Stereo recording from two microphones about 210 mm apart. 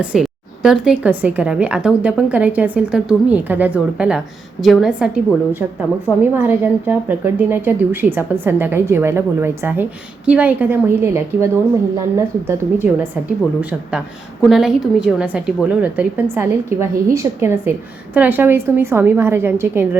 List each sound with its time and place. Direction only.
0.0 s a woman's voice: 5° right (ahead or behind)